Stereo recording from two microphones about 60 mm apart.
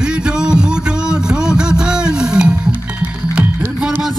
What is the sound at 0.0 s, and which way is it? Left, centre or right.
Music, centre.